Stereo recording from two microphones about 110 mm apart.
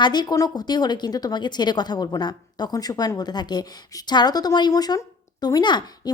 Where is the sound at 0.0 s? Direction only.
40° left (ahead or behind).